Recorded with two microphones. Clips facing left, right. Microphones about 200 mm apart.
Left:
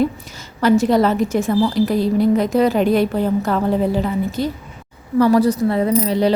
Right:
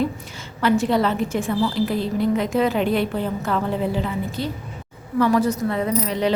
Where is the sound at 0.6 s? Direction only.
40° left (ahead or behind).